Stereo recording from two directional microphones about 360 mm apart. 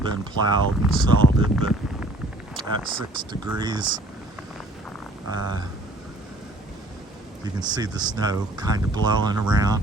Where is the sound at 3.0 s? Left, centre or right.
Centre.